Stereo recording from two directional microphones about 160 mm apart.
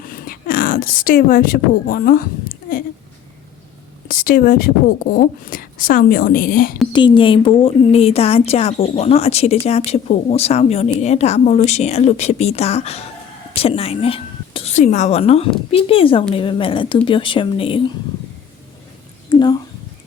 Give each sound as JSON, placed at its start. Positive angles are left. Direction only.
{"t": 0.0, "sound": "a woman's voice", "side_deg": 60}
{"t": 4.1, "sound": "a woman's voice", "side_deg": 65}
{"t": 6.9, "sound": "a woman's voice", "side_deg": 30}
{"t": 19.3, "sound": "speech", "side_deg": 25}